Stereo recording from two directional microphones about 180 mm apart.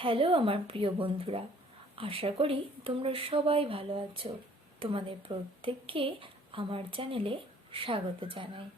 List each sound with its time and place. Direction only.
0.0 s speech: 30° right (ahead or behind)